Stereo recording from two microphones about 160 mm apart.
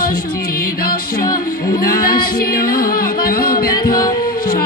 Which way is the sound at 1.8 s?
70° left (ahead or behind).